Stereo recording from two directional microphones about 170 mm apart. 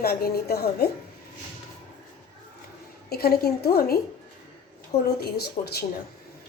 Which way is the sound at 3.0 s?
65° left (ahead or behind).